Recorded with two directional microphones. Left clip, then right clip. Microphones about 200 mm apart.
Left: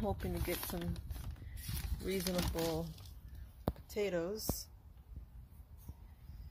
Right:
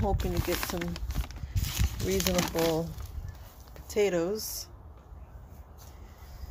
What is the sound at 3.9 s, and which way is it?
Speech, 5° right (ahead or behind).